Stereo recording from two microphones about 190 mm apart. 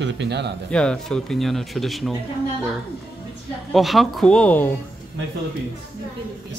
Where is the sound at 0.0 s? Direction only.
65° right (ahead or behind).